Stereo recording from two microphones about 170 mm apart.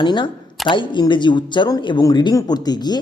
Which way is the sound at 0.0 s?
25° left (ahead or behind).